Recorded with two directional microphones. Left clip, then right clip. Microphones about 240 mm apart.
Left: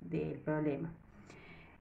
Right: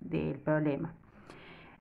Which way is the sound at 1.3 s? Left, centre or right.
Right.